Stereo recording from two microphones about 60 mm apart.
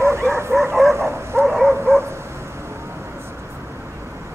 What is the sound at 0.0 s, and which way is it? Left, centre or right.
Bow-wow, right.